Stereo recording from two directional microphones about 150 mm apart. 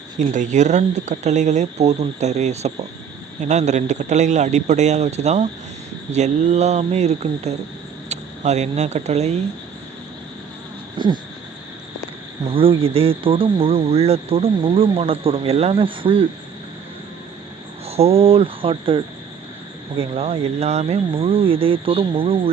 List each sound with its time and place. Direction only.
0.3 s speech: 55° right (ahead or behind)
10.9 s a sound: 30° right (ahead or behind)
12.5 s speech: 35° right (ahead or behind)
17.8 s speech: 40° right (ahead or behind)